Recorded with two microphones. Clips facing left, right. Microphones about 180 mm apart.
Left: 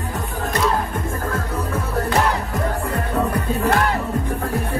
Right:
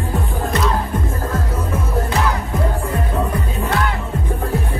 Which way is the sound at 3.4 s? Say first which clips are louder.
Left 2 dB; 40° left (ahead or behind).